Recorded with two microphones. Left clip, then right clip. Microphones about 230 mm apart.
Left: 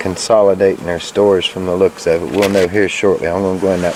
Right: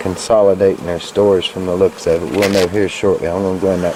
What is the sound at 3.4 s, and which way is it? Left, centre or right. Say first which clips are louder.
Speech: left 1 dB; centre.